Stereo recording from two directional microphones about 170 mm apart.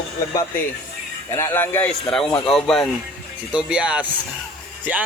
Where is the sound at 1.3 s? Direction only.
15° left (ahead or behind).